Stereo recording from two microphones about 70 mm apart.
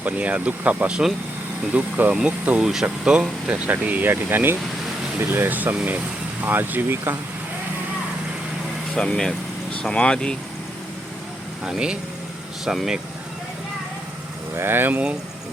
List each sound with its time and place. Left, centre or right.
0.0 s speech: right
9.0 s speech: centre
12.6 s speech: centre
14.5 s speech: right